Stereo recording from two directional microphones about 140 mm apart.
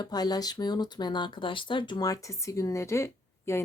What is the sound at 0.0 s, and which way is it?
A woman's voice, 30° left (ahead or behind).